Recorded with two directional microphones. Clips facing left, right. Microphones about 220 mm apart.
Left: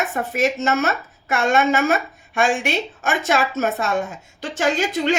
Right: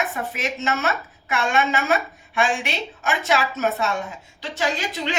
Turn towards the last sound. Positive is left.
turn(degrees=45)  # may be behind; listen again after turning